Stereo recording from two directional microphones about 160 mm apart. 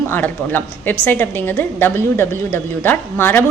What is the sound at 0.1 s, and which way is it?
A woman's voice, 10° left (ahead or behind).